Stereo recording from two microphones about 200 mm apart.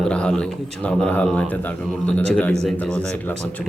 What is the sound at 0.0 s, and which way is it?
A man's voice, 5° left (ahead or behind).